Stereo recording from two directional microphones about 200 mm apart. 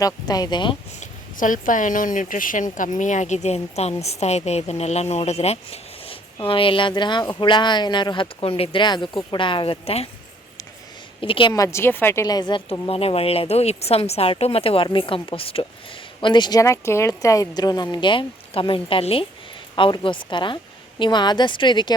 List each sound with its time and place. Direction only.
0.0 s a woman's voice: 20° left (ahead or behind)
0.9 s a woman's voice: 40° left (ahead or behind)
11.2 s a woman's voice: 25° left (ahead or behind)